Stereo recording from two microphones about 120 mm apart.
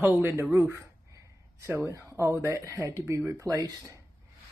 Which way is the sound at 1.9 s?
25° right (ahead or behind).